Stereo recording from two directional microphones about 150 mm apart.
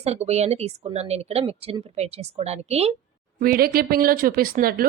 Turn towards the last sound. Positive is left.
turn(degrees=-75)  # may be behind; listen again after turning